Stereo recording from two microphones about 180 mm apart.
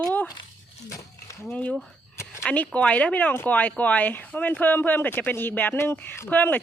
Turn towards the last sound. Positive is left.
turn(degrees=10)  # may be behind; listen again after turning